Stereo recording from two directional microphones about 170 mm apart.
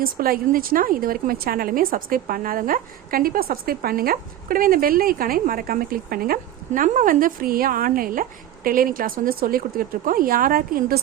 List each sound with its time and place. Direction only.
0.0 s a woman's voice: 60° right (ahead or behind)